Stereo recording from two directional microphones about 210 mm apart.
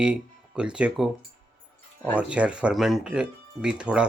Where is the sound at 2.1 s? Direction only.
5° right (ahead or behind).